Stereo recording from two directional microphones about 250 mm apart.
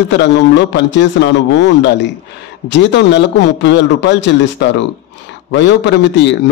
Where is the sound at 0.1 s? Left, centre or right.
Left.